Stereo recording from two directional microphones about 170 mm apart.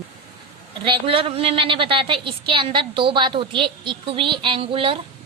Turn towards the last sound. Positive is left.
turn(degrees=-30)  # may be behind; listen again after turning